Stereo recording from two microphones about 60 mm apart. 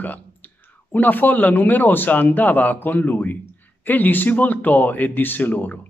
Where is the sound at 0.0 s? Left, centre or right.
Left.